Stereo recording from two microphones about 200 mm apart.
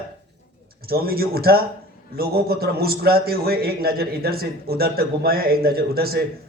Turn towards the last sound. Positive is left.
turn(degrees=-50)  # may be behind; listen again after turning